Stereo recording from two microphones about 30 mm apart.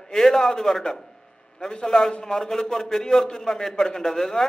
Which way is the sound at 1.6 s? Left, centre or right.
Left.